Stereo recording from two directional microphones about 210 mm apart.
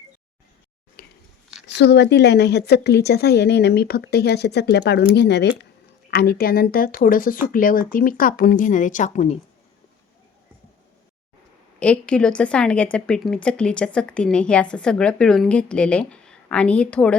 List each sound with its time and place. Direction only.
1.0 s a sound: 45° left (ahead or behind)
1.6 s a woman's voice: 55° left (ahead or behind); by 9.4 s 35° left (ahead or behind)
11.8 s a woman's voice: 5° left (ahead or behind)